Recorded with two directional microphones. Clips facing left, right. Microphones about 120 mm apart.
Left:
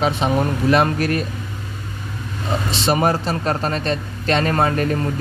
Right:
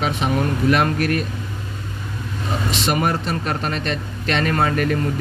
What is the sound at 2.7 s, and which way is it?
Speech, 30° left (ahead or behind).